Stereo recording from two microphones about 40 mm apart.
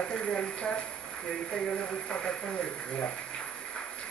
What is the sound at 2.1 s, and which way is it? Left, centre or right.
Speech, left.